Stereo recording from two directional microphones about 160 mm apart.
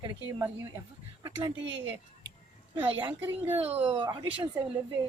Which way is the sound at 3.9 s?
30° right (ahead or behind).